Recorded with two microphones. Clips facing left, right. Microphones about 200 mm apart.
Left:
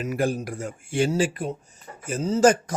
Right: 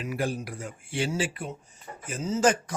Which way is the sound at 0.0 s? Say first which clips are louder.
Left 5 dB; 45° left (ahead or behind).